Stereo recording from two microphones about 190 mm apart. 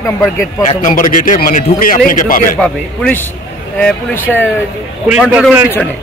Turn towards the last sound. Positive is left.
turn(degrees=-5)  # may be behind; listen again after turning